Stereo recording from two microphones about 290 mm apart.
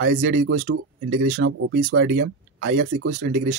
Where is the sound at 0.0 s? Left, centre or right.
Right.